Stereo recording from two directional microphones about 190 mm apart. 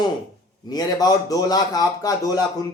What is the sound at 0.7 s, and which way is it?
Speech, 20° left (ahead or behind).